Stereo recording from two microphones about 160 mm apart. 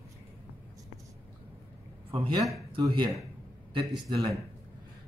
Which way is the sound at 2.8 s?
30° right (ahead or behind).